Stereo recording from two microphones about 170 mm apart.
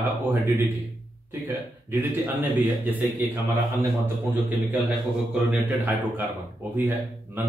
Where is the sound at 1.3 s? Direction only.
10° right (ahead or behind).